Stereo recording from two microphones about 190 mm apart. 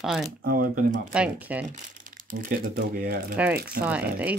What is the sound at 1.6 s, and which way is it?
Speech, 45° right (ahead or behind).